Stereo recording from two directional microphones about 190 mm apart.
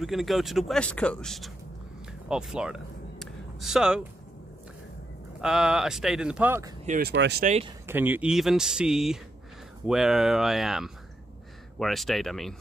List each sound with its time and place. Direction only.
0.0 s speech: centre (ahead or behind)
2.2 s a sound: 5° right (ahead or behind)
5.4 s speech: 5° right (ahead or behind)
7.0 s speech: 60° right (ahead or behind)
7.4 s speech: 35° right (ahead or behind)
7.8 s speech: 10° right (ahead or behind)